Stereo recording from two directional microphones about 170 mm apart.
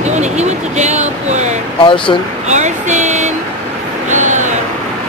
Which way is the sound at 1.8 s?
30° left (ahead or behind).